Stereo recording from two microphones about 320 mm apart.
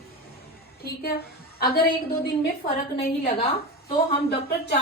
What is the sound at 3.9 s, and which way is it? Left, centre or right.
Speech, centre.